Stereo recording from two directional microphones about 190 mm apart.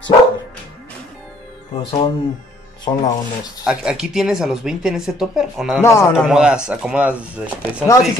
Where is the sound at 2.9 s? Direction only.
20° left (ahead or behind).